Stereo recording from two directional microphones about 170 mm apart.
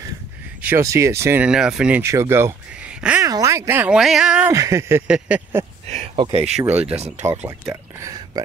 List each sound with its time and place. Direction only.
0.6 s speech: 10° right (ahead or behind)
3.3 s speech: 20° right (ahead or behind)
4.5 s speech: 20° right (ahead or behind)
5.9 s speech: 40° right (ahead or behind)
6.5 s speech: 10° right (ahead or behind)